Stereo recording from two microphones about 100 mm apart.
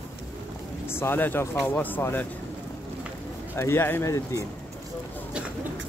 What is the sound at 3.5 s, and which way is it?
Speech, 25° left (ahead or behind).